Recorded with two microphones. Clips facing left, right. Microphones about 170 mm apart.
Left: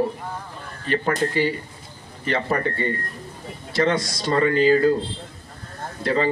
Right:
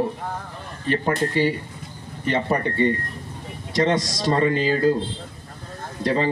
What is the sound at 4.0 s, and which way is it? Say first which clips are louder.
Speech: even; 40° right (ahead or behind).